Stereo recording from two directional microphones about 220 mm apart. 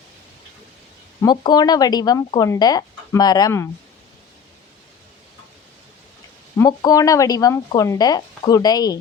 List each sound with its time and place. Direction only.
1.2 s speech: 20° left (ahead or behind)
6.6 s speech: 15° left (ahead or behind)